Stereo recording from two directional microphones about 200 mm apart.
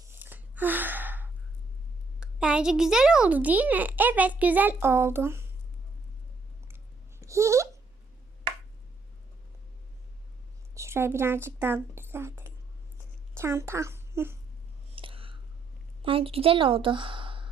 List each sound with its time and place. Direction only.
0.0 s a sound: 10° right (ahead or behind)
2.2 s a child's voice: 5° right (ahead or behind)
7.2 s babbling: 15° right (ahead or behind)
10.8 s a woman's voice: 15° right (ahead or behind)
14.9 s a sound: 25° right (ahead or behind)
16.0 s a woman's voice: 30° right (ahead or behind)